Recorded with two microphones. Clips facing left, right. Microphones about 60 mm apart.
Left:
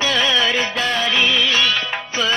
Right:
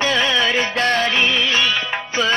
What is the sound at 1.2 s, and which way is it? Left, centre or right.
Music, centre.